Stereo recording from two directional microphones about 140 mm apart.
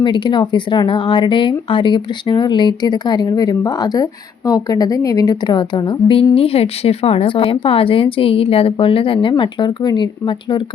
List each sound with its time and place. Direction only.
0.0 s speech: 35° left (ahead or behind)
6.3 s speech: 45° left (ahead or behind)